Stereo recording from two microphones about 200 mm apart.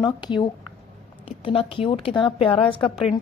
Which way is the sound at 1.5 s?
25° left (ahead or behind).